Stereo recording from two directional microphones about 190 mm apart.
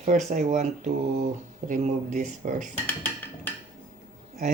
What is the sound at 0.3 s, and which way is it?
A man's voice, 40° right (ahead or behind).